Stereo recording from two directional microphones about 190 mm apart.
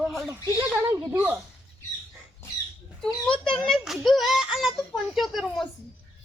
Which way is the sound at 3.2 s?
5° left (ahead or behind).